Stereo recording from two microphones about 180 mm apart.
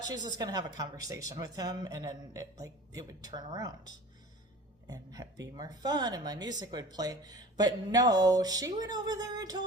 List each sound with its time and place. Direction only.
0.1 s a man's voice: 20° right (ahead or behind)